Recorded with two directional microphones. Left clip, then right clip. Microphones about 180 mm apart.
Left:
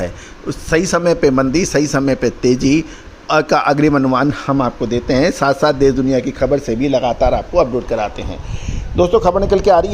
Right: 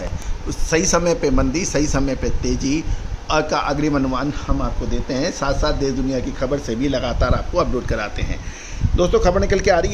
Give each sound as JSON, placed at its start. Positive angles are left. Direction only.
{"t": 0.4, "sound": "a man's voice", "side_deg": 25}